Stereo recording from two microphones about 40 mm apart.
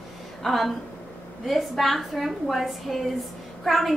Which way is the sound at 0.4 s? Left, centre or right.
Centre.